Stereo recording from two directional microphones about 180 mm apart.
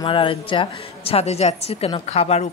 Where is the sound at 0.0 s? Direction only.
30° left (ahead or behind).